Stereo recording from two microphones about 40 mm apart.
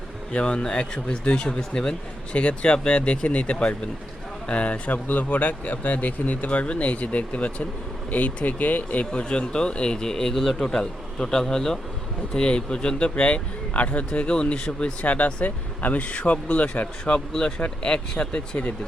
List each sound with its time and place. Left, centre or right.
0.3 s speech: left
2.3 s speech: left
5.0 s speech: left
9.3 s speech: left
14.1 s speech: left
15.0 s speech: left
17.2 s speech: centre